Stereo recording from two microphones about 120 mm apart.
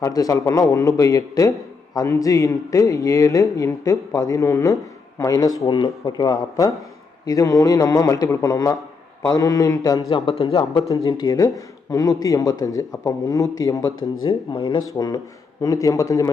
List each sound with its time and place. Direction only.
0.0 s a man's voice: 30° left (ahead or behind)
5.6 s a man's voice: 40° left (ahead or behind)
10.1 s speech: 45° left (ahead or behind)
10.8 s a man's voice: 30° left (ahead or behind)
14.3 s a man's voice: 40° left (ahead or behind)